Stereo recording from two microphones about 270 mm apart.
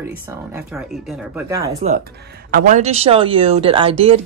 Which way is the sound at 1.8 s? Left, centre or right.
Right.